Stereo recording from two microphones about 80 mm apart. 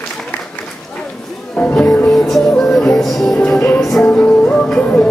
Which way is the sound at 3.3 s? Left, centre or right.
Centre.